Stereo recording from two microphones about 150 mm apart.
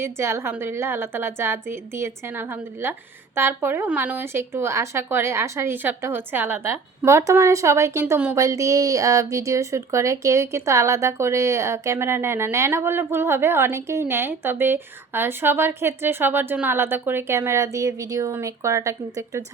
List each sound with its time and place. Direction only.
0.0 s speech: 15° right (ahead or behind)